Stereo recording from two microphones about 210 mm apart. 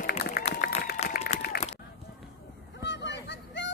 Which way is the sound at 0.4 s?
45° left (ahead or behind).